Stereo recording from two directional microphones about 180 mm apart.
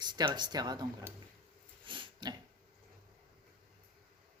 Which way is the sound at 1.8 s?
25° right (ahead or behind).